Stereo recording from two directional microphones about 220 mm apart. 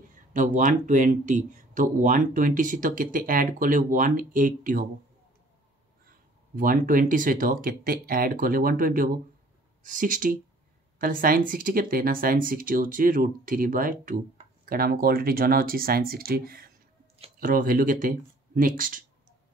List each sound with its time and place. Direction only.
0.3 s speech: 35° right (ahead or behind)
6.5 s speech: 40° right (ahead or behind)